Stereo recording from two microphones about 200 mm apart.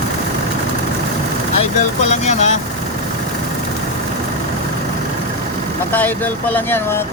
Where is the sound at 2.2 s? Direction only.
35° left (ahead or behind).